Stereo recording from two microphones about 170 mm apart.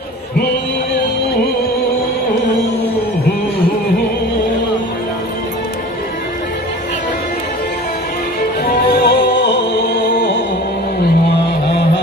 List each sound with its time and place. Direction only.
8.6 s music: 65° left (ahead or behind); by 9.8 s 90° left
10.1 s music: 55° left (ahead or behind)